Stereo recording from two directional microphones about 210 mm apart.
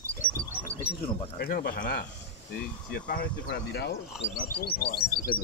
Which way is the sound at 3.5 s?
50° left (ahead or behind).